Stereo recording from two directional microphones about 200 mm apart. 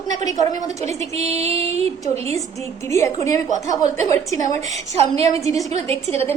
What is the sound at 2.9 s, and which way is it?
Speech, 15° left (ahead or behind).